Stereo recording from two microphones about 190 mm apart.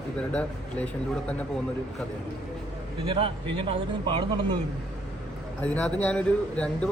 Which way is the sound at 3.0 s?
25° right (ahead or behind).